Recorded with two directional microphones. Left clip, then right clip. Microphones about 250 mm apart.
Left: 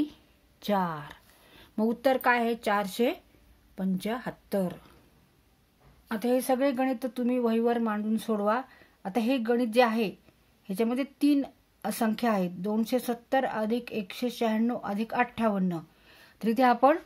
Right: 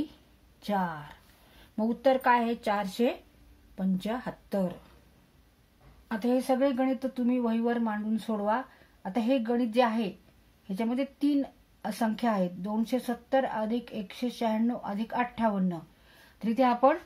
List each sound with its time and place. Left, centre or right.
0.6 s speech: left
6.0 s a woman's voice: left